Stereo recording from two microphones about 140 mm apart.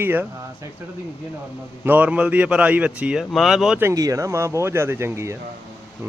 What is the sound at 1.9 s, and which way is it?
Speech, 10° right (ahead or behind).